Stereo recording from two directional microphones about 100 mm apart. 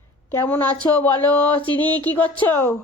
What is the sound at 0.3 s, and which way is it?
Speech, 15° left (ahead or behind).